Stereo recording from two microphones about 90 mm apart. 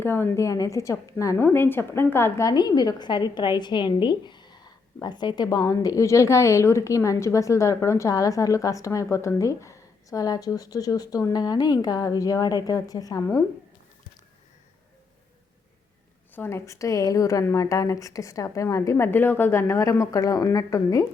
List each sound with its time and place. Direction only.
0.0 s a woman's voice: 25° left (ahead or behind)
1.5 s a woman's voice: 20° left (ahead or behind)
2.5 s a woman's voice: 50° left (ahead or behind)
16.3 s a woman's voice: 25° left (ahead or behind)